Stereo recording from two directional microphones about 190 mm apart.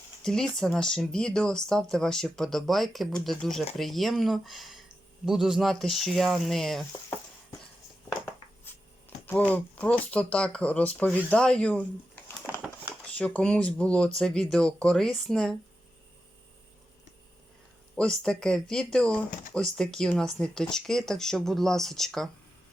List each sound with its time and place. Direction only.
0.2 s speech: 5° left (ahead or behind)
9.2 s speech: 10° left (ahead or behind)
17.9 s speech: 5° left (ahead or behind)